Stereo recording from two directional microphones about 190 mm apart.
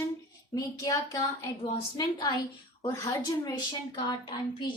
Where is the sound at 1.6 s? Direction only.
25° left (ahead or behind).